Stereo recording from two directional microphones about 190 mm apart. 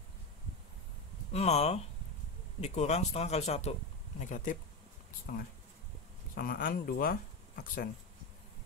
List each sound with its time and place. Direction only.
1.3 s speech: 35° left (ahead or behind); by 7.9 s 50° left (ahead or behind)